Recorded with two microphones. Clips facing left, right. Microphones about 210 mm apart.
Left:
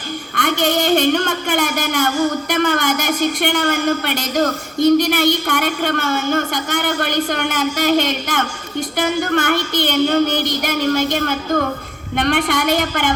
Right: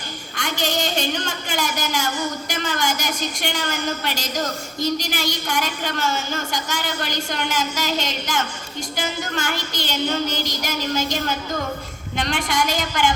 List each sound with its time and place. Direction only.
0.3 s a woman's voice: 55° left (ahead or behind)